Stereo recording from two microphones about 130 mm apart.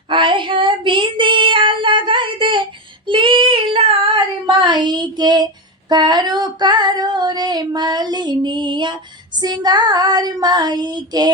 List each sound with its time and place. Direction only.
0.1 s child singing: 40° right (ahead or behind)
5.9 s female singing: 35° right (ahead or behind)